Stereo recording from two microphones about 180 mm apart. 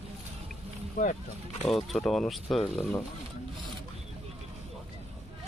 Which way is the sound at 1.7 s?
Centre (ahead or behind).